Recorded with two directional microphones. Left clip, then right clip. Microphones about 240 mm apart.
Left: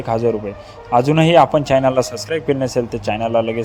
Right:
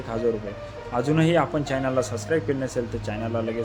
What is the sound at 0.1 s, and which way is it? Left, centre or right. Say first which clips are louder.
Speech: left 7 dB; left.